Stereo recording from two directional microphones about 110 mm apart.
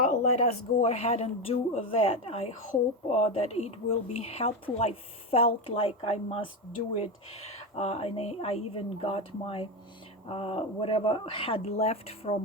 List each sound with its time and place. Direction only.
0.3 s speech: 90° left; by 2.5 s 60° left (ahead or behind)
3.1 s speech: 80° left; by 6.4 s 60° left (ahead or behind)
7.8 s speech: 75° left (ahead or behind)